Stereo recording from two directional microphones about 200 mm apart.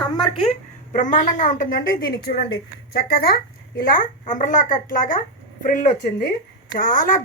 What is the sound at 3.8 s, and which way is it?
A woman's voice, 45° left (ahead or behind).